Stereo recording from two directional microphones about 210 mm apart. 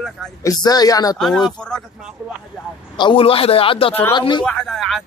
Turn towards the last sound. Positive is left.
turn(degrees=0)  # may be behind; listen again after turning